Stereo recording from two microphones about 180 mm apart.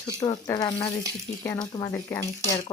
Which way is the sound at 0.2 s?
20° left (ahead or behind).